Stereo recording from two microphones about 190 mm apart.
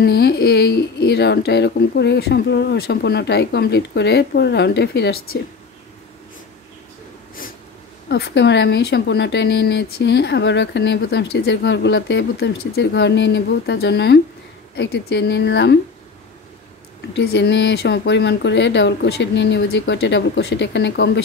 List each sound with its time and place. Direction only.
0.0 s speech: 55° left (ahead or behind)
8.1 s speech: 65° left (ahead or behind)
17.1 s speech: 65° left (ahead or behind)